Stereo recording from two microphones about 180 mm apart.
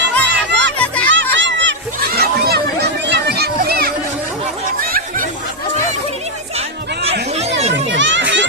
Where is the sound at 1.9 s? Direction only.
60° right (ahead or behind).